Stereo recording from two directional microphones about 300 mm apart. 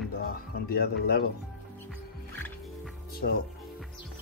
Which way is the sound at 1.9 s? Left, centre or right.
Centre.